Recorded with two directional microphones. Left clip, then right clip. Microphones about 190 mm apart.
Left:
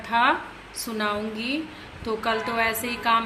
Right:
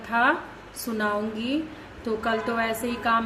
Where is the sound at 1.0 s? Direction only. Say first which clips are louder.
Even; 25° right (ahead or behind).